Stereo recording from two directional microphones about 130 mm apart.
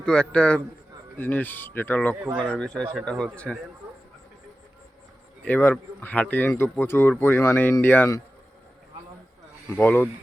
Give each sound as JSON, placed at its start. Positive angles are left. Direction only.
{"t": 0.0, "sound": "speech", "side_deg": 5}
{"t": 5.5, "sound": "speech", "side_deg": 15}
{"t": 9.7, "sound": "speech", "side_deg": 15}